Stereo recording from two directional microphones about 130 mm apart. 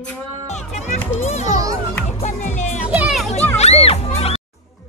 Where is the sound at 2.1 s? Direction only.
60° left (ahead or behind).